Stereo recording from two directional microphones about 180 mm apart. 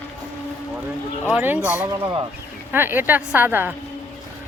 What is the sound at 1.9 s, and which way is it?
Speech, 25° right (ahead or behind).